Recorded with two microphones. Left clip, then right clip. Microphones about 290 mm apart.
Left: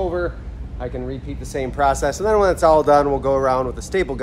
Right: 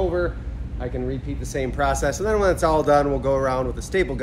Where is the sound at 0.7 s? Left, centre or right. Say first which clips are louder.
Left 1 dB; centre.